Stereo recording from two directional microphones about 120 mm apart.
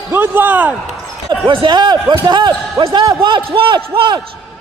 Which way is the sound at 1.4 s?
45° right (ahead or behind).